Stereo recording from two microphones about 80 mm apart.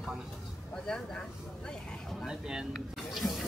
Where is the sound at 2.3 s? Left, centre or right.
Centre.